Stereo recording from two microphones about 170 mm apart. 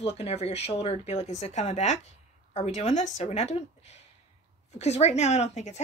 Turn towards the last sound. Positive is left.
turn(degrees=40)  # may be behind; listen again after turning